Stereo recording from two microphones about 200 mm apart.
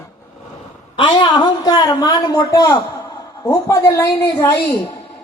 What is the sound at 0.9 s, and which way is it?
A woman's voice, 25° left (ahead or behind).